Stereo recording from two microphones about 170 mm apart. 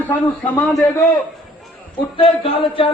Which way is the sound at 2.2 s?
35° left (ahead or behind).